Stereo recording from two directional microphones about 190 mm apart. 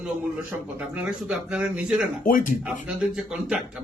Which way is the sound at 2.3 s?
45° left (ahead or behind).